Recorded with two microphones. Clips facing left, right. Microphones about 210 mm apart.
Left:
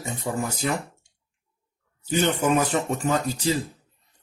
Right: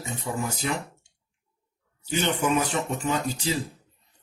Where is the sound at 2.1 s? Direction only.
45° left (ahead or behind).